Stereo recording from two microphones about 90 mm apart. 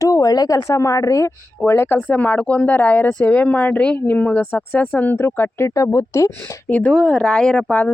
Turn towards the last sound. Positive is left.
turn(degrees=10)  # may be behind; listen again after turning